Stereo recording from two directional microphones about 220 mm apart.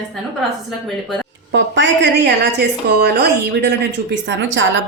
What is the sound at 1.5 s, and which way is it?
A woman's voice, 55° right (ahead or behind).